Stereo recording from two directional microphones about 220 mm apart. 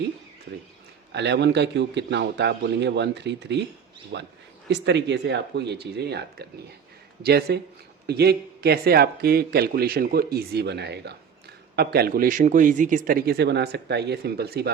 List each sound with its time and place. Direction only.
1.1 s a man's voice: 50° right (ahead or behind)